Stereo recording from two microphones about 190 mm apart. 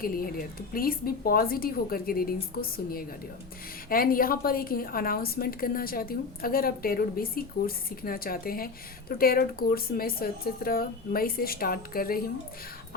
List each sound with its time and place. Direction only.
0.0 s speech: 50° left (ahead or behind)